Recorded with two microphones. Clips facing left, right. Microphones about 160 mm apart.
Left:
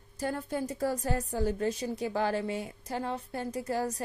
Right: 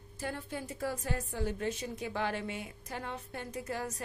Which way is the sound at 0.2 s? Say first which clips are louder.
Left 6 dB; 40° left (ahead or behind).